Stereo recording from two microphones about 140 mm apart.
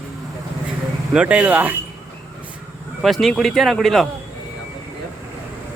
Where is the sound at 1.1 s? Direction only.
5° right (ahead or behind).